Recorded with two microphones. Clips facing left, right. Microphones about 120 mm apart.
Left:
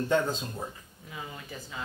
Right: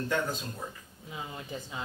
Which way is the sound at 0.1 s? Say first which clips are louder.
Left 5 dB; 25° left (ahead or behind).